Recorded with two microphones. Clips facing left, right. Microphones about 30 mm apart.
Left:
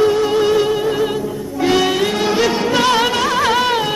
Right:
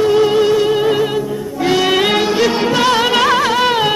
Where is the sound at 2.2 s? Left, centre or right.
Centre.